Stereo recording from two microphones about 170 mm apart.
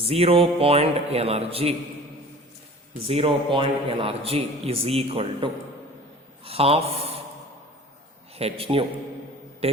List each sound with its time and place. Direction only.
0.0 s a man's voice: 35° right (ahead or behind)
3.1 s a man's voice: 35° right (ahead or behind)
8.4 s a man's voice: 35° right (ahead or behind)